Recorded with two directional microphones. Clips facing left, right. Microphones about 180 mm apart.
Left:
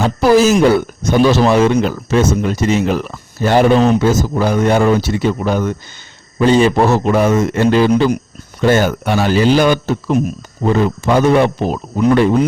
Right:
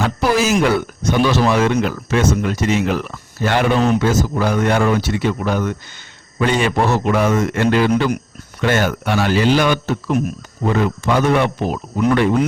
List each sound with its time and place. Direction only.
0.0 s speech: 40° left (ahead or behind)